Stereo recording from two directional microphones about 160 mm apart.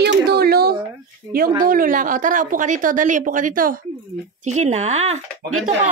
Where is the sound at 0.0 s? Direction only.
85° right.